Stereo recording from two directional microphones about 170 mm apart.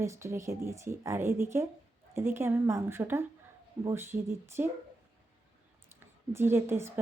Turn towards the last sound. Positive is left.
turn(degrees=-15)  # may be behind; listen again after turning